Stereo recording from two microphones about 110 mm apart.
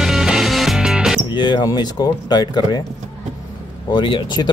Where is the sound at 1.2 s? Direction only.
45° left (ahead or behind).